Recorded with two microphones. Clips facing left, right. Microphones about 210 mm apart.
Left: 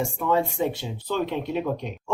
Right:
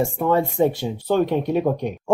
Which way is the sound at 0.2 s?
45° right (ahead or behind).